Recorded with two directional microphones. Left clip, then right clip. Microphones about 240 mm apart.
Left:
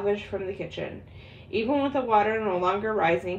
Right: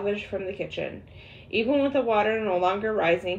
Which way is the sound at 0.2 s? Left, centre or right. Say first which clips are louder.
Right 1 dB; centre.